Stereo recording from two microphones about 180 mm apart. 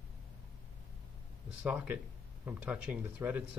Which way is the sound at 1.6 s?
5° right (ahead or behind).